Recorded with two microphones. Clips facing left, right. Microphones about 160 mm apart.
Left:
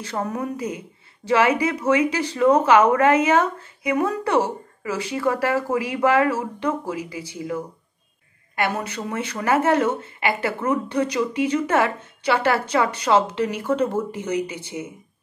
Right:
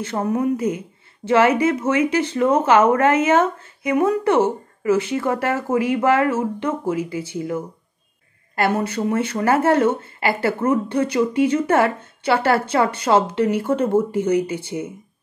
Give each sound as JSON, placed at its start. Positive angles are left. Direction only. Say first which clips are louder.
{"t": 0.0, "sound": "speech", "louder": "right 6 dB", "side_deg": -25}
{"t": 8.7, "sound": "speech", "louder": "right 7 dB", "side_deg": -30}